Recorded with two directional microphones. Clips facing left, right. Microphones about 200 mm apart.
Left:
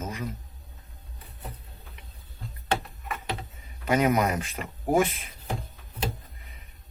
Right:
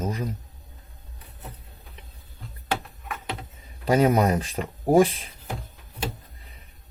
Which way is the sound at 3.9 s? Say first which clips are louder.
Right 4 dB; 30° right (ahead or behind).